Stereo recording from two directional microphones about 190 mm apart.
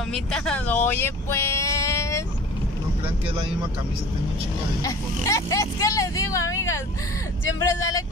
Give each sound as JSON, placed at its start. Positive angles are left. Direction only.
{"t": 0.1, "sound": "speech", "side_deg": 5}
{"t": 4.8, "sound": "speech", "side_deg": 15}